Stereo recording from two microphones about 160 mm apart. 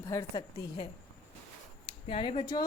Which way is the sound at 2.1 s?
35° left (ahead or behind).